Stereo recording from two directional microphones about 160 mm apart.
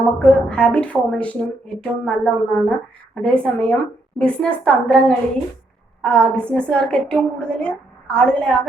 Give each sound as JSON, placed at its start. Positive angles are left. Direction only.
{"t": 0.0, "sound": "a woman's voice", "side_deg": 5}